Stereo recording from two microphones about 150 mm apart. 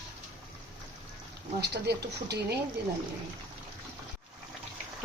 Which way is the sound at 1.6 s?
90° right.